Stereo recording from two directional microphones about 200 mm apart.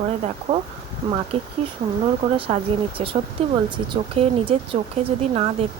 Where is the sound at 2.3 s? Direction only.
30° right (ahead or behind).